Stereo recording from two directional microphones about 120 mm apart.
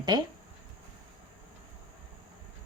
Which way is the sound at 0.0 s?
35° right (ahead or behind).